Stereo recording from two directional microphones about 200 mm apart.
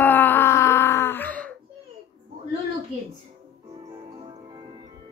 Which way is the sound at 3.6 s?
20° right (ahead or behind).